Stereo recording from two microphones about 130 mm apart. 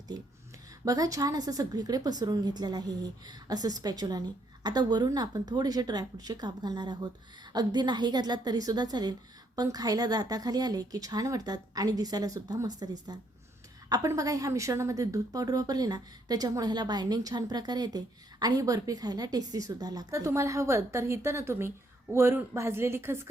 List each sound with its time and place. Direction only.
0.9 s a woman's voice: 25° right (ahead or behind)